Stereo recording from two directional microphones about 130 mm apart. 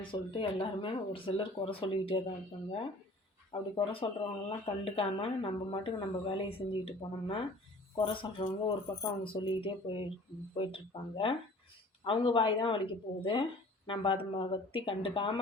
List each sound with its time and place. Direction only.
0.1 s speech: 40° left (ahead or behind)
3.5 s speech: 45° left (ahead or behind)